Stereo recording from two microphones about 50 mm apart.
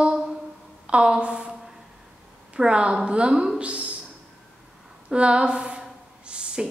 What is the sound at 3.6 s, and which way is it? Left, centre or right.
Speech, right.